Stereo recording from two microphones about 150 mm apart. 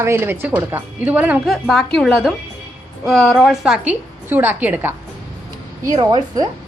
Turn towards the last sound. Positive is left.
turn(degrees=-25)  # may be behind; listen again after turning